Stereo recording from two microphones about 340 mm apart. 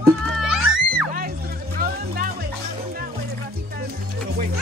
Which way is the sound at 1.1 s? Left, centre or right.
Right.